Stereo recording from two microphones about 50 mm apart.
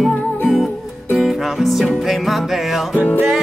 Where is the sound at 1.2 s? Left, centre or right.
Centre.